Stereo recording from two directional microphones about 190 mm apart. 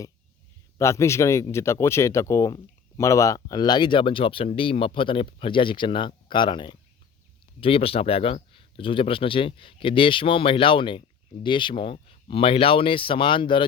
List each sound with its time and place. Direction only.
0.8 s speech: 15° left (ahead or behind)